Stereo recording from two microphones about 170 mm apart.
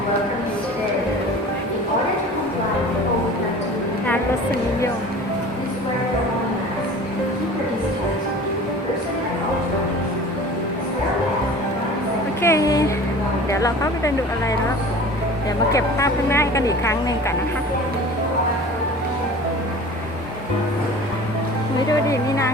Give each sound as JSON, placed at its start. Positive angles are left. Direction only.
{"t": 12.4, "sound": "a sound", "side_deg": 15}
{"t": 13.5, "sound": "a woman's voice", "side_deg": 20}
{"t": 15.7, "sound": "speech", "side_deg": 20}
{"t": 21.8, "sound": "speech", "side_deg": 20}